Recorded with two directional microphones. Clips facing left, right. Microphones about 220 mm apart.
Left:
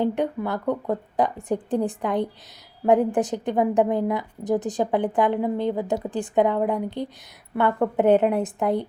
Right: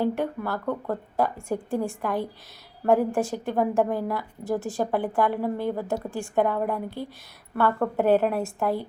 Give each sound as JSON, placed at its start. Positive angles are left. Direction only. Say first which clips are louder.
{"t": 0.0, "sound": "a woman's voice", "louder": "left 2 dB", "side_deg": 15}